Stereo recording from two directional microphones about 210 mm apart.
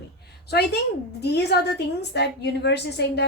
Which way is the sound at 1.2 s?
50° left (ahead or behind).